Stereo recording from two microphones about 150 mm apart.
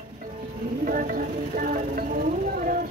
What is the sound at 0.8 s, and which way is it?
Speech, 65° right (ahead or behind).